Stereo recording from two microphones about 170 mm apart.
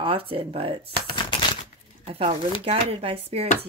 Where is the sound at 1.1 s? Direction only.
25° left (ahead or behind).